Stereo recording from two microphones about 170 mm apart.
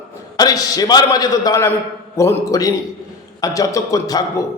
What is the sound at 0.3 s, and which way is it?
A man's voice, 20° left (ahead or behind).